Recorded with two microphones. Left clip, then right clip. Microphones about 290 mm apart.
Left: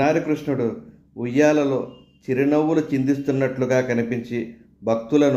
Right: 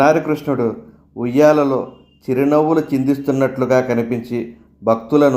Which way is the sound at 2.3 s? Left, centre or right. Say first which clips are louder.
Right 5 dB; right.